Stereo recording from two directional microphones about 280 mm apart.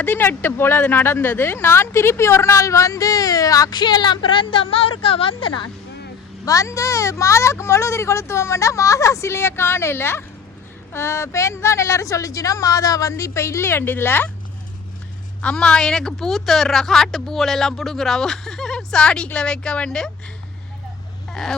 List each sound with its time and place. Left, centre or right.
0.0 s speech: centre
15.4 s speech: centre